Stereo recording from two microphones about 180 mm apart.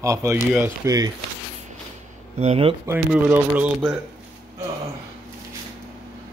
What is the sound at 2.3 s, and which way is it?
Speech, 35° right (ahead or behind).